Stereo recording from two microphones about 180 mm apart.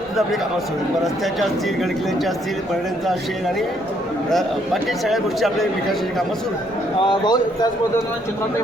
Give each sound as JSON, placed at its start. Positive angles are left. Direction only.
{"t": 1.0, "sound": "a man's voice", "side_deg": 0}
{"t": 4.3, "sound": "a man's voice", "side_deg": 0}
{"t": 7.1, "sound": "speech", "side_deg": 25}